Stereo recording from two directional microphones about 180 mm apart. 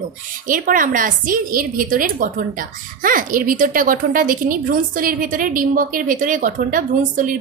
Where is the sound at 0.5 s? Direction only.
50° right (ahead or behind).